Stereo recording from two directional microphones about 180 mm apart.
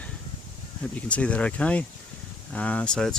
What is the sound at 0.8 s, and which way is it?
Speech, 5° left (ahead or behind).